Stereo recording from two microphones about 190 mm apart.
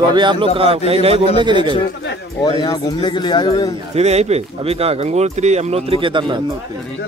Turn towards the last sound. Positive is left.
turn(degrees=-25)  # may be behind; listen again after turning